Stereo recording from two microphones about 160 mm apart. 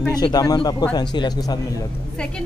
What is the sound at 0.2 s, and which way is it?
Speech, 25° left (ahead or behind).